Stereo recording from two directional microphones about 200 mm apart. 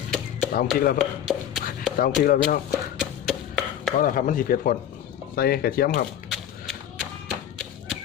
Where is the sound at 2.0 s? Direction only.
45° left (ahead or behind).